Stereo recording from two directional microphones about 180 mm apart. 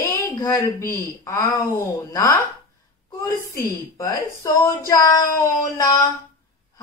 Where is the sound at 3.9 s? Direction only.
20° left (ahead or behind).